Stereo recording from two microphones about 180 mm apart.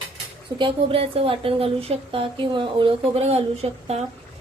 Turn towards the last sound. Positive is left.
turn(degrees=-35)  # may be behind; listen again after turning